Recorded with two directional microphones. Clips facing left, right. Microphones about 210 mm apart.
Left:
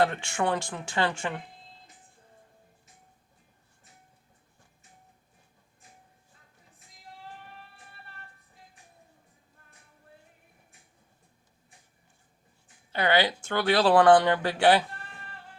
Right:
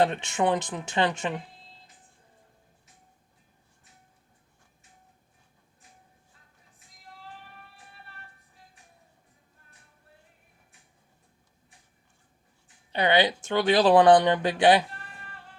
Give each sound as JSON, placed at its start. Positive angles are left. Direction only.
{"t": 0.0, "sound": "speech", "side_deg": -20}
{"t": 12.9, "sound": "speech", "side_deg": -20}